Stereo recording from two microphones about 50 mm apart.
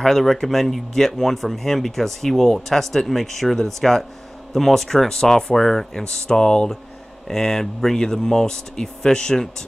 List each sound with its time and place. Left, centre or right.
0.0 s speech: centre